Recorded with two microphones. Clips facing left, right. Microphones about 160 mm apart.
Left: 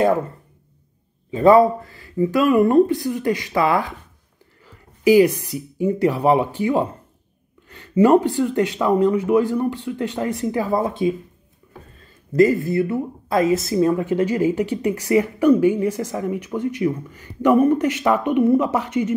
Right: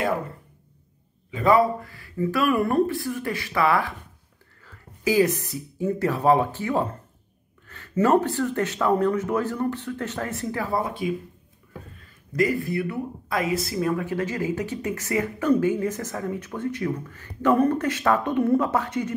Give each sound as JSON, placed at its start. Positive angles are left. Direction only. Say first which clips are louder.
{"t": 1.3, "sound": "speech", "louder": "left 6 dB", "side_deg": 25}
{"t": 12.3, "sound": "speech", "louder": "left 8 dB", "side_deg": 25}